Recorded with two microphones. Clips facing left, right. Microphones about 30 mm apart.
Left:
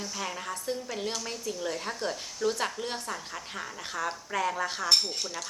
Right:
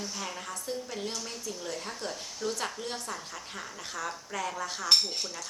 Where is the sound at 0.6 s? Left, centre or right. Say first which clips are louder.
Left 2 dB; centre.